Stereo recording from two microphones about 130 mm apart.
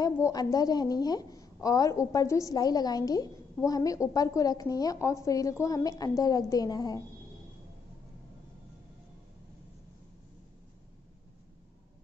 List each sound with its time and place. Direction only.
0.0 s a woman's voice: 30° left (ahead or behind)